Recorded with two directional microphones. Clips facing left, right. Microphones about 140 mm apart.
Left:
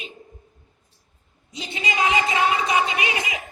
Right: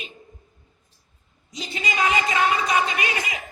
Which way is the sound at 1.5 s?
25° left (ahead or behind).